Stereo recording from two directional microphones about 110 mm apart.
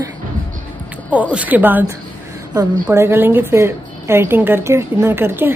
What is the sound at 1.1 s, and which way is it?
Speech, 10° right (ahead or behind).